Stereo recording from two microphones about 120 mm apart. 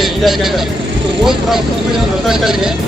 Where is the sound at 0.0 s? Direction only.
Centre (ahead or behind).